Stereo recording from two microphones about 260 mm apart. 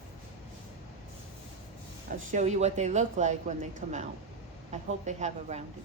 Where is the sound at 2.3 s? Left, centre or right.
Right.